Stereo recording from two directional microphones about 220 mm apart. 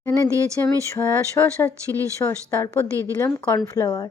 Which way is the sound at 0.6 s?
10° left (ahead or behind).